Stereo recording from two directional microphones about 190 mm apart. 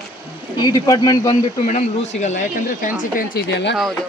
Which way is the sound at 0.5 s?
20° left (ahead or behind).